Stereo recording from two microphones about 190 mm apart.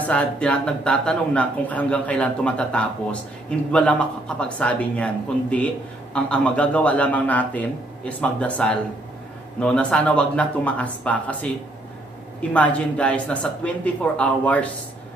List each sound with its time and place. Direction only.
0.0 s a man's voice: 5° left (ahead or behind)